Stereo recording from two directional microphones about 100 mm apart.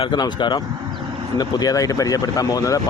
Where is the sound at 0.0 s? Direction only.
50° left (ahead or behind).